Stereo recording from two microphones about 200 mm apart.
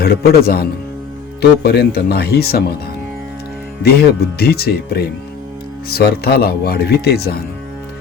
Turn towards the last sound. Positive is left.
turn(degrees=50)  # may be behind; listen again after turning